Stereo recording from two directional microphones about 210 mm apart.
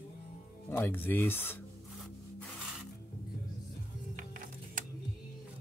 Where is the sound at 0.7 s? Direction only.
10° left (ahead or behind).